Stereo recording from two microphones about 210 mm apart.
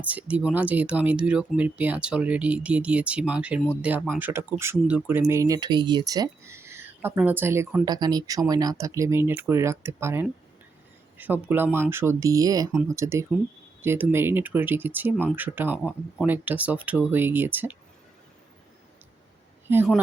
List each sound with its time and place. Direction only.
0.0 s speech: 5° right (ahead or behind)